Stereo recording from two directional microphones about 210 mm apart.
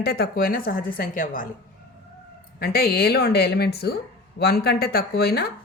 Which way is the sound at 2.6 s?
45° left (ahead or behind).